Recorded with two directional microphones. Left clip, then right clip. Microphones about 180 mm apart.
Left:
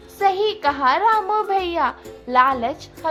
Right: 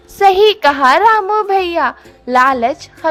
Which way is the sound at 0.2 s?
45° right (ahead or behind).